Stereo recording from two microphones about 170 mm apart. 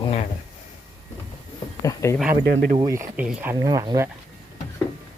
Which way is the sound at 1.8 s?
20° left (ahead or behind).